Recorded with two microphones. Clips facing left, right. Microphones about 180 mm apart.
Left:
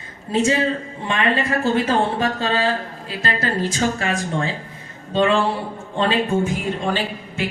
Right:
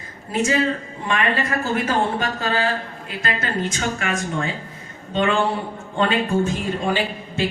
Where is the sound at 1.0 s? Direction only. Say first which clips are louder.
Left 1 dB; 25° left (ahead or behind).